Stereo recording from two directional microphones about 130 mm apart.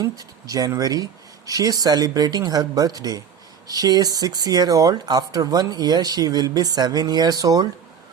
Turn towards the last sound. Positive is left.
turn(degrees=-30)  # may be behind; listen again after turning